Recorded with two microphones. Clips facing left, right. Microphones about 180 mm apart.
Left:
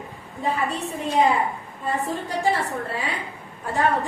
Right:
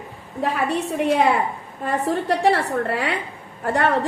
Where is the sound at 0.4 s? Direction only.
75° right (ahead or behind).